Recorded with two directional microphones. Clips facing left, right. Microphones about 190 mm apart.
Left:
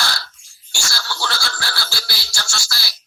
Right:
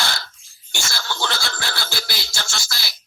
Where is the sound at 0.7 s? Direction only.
20° right (ahead or behind).